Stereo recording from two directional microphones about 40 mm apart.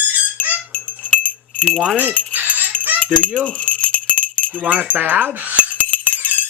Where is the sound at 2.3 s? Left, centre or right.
Right.